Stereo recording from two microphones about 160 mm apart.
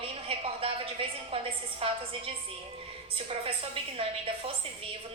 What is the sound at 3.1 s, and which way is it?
Speech, 35° right (ahead or behind).